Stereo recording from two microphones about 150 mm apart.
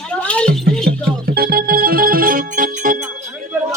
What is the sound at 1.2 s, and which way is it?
Music, 90° right.